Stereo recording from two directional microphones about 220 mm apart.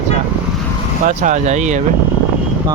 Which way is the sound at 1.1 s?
35° right (ahead or behind).